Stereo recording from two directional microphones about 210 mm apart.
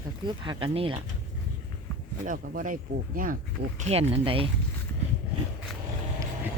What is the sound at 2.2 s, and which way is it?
Speech, 40° right (ahead or behind).